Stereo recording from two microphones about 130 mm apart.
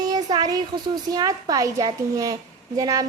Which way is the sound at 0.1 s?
30° right (ahead or behind).